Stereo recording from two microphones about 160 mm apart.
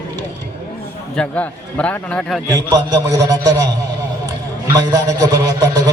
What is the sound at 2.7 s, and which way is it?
Speech, 25° right (ahead or behind).